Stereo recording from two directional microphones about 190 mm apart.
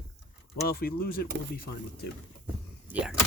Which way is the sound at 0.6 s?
50° left (ahead or behind).